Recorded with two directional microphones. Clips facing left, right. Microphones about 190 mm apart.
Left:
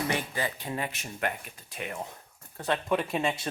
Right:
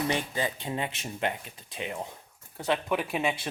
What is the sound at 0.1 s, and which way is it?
Speech, 20° right (ahead or behind).